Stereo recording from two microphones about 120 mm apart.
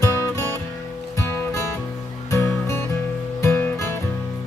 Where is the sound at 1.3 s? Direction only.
25° left (ahead or behind).